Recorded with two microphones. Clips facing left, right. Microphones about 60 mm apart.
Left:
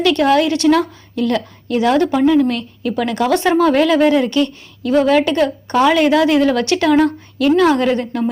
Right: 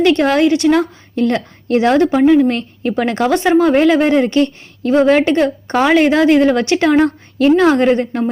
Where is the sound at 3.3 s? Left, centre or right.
Right.